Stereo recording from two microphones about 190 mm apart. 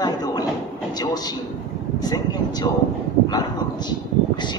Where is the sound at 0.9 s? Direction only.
20° left (ahead or behind).